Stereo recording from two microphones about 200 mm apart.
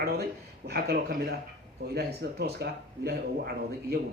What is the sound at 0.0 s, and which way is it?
Speech, 50° right (ahead or behind).